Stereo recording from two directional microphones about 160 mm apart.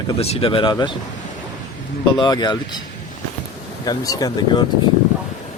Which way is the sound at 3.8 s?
20° left (ahead or behind).